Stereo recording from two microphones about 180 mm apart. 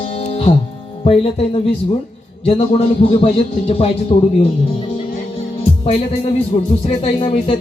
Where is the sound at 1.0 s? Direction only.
30° left (ahead or behind).